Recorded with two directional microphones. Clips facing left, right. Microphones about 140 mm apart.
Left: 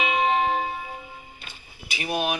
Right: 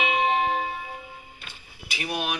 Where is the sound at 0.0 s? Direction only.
30° left (ahead or behind).